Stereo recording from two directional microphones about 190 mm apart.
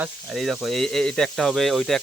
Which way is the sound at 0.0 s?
Centre (ahead or behind).